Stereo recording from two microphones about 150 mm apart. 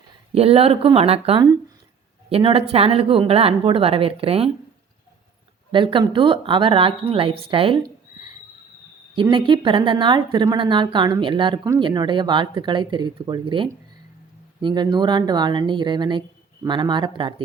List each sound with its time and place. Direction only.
0.3 s a woman's voice: 40° right (ahead or behind)
5.7 s a woman's voice: 35° right (ahead or behind)
9.3 s a woman's voice: 35° right (ahead or behind)